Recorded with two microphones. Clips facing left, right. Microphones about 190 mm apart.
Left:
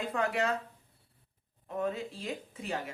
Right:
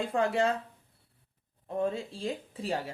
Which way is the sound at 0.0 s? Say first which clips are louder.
Right 4 dB; 30° right (ahead or behind).